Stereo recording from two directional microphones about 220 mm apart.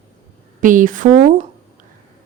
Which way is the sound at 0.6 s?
35° right (ahead or behind).